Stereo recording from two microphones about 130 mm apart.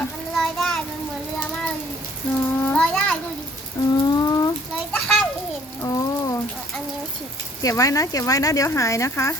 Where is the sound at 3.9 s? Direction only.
30° left (ahead or behind).